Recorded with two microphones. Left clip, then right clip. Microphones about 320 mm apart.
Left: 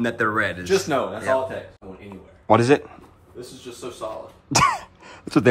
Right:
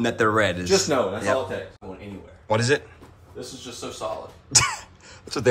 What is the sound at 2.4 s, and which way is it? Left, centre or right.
Speech, centre.